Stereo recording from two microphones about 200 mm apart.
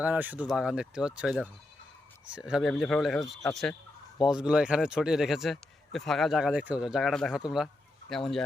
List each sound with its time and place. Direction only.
0.0 s speech: 5° right (ahead or behind)